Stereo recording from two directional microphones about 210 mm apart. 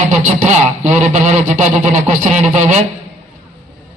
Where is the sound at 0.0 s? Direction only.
35° right (ahead or behind).